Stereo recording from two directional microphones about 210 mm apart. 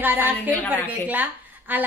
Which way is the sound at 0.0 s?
10° right (ahead or behind).